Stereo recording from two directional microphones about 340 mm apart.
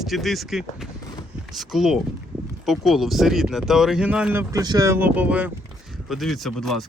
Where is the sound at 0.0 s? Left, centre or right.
Centre.